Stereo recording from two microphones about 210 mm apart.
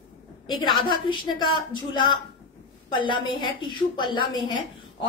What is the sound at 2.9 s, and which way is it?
A woman's voice, 25° left (ahead or behind).